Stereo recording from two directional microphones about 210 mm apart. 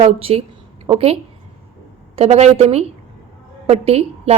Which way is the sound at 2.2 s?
30° right (ahead or behind).